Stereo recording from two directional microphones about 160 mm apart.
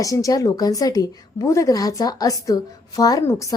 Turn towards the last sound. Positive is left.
turn(degrees=20)  # may be behind; listen again after turning